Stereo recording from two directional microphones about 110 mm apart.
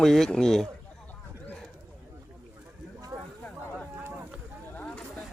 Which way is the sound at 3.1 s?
35° right (ahead or behind).